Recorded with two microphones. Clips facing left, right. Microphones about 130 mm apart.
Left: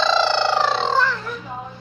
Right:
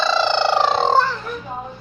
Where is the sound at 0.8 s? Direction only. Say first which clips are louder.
Right 3 dB; 50° right (ahead or behind).